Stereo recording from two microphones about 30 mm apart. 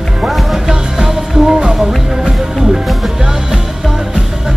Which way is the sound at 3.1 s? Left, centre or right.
Centre.